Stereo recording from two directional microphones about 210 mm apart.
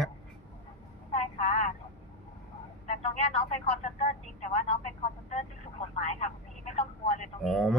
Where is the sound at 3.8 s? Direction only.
35° left (ahead or behind).